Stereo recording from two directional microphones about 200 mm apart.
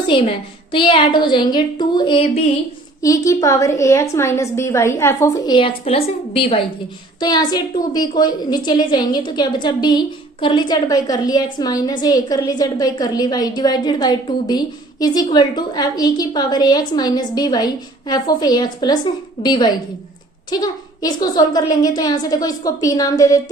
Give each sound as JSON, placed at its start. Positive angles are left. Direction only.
{"t": 0.1, "sound": "a woman's voice", "side_deg": 25}
{"t": 3.0, "sound": "a woman's voice", "side_deg": 15}
{"t": 5.5, "sound": "a woman's voice", "side_deg": 30}